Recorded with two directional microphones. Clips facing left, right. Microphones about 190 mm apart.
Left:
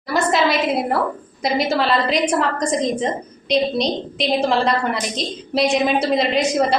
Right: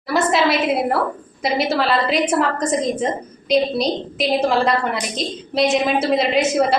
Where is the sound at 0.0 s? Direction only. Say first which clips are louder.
Right 1 dB; centre (ahead or behind).